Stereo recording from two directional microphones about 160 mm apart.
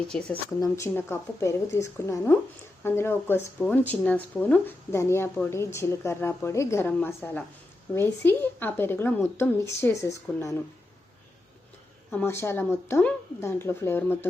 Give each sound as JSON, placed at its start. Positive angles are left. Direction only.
{"t": 0.1, "sound": "speech", "side_deg": 5}
{"t": 12.1, "sound": "speech", "side_deg": 15}